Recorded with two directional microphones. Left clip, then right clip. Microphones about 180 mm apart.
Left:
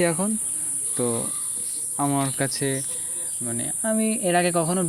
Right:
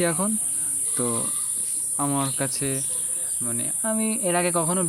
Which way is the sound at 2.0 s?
10° left (ahead or behind).